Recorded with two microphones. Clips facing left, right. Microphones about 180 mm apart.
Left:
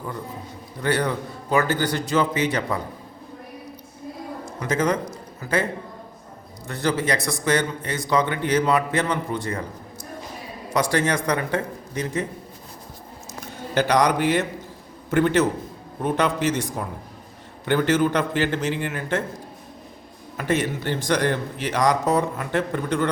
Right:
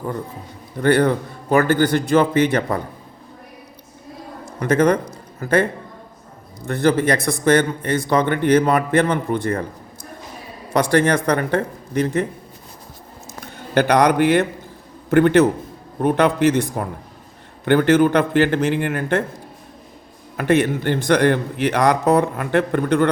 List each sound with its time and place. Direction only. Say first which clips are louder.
0.8 s a man's voice: right 7 dB; 55° right (ahead or behind)
4.6 s a man's voice: right 6 dB; 60° right (ahead or behind)
6.7 s a man's voice: right 6 dB; 55° right (ahead or behind)
13.7 s a man's voice: right 5 dB; 60° right (ahead or behind)
20.3 s a man's voice: right 6 dB; 60° right (ahead or behind)